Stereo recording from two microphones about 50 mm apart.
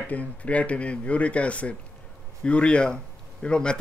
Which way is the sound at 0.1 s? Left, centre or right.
Left.